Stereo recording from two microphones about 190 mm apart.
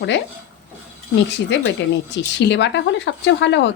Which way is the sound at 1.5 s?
70° left (ahead or behind).